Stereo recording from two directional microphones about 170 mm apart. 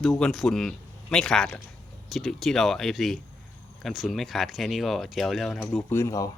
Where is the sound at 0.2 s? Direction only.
Centre (ahead or behind).